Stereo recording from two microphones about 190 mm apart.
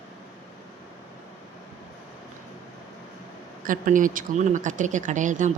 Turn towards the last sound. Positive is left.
turn(degrees=-40)  # may be behind; listen again after turning